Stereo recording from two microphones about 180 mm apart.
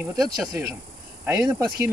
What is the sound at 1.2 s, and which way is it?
Speech, 20° right (ahead or behind).